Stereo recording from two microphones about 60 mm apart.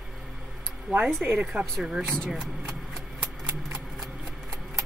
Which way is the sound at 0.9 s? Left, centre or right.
Right.